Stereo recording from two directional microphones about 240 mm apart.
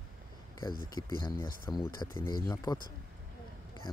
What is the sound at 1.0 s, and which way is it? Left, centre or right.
Speech, centre.